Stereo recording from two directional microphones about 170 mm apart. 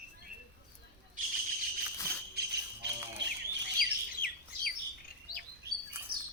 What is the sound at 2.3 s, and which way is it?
Music, 75° right (ahead or behind).